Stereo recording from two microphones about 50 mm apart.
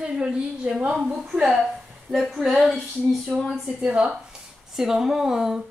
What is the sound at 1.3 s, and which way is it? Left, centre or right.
Speech, centre.